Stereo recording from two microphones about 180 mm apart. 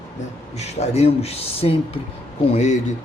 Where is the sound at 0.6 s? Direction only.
35° left (ahead or behind).